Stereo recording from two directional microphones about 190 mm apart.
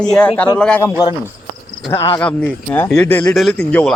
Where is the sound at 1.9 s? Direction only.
15° left (ahead or behind).